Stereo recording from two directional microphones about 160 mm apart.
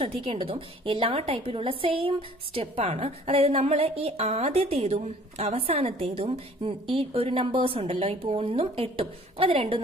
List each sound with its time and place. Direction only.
0.0 s a woman's voice: 35° right (ahead or behind)